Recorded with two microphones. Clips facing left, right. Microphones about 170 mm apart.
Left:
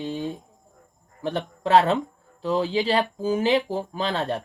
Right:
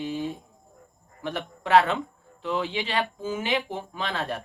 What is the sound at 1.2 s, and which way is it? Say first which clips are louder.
Speech: left 5 dB; 35° left (ahead or behind).